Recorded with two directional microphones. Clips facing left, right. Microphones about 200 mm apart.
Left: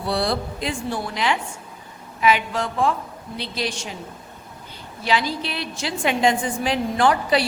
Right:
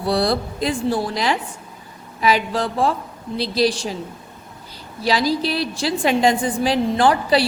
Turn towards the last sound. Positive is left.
turn(degrees=-35)  # may be behind; listen again after turning